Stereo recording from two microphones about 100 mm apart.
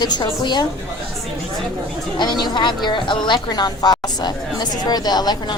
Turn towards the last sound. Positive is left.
turn(degrees=45)  # may be behind; listen again after turning